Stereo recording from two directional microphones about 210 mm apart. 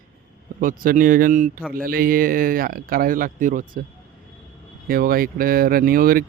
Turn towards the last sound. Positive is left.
turn(degrees=-45)  # may be behind; listen again after turning